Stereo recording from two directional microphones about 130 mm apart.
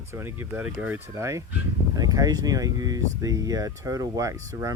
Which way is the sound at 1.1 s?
25° right (ahead or behind).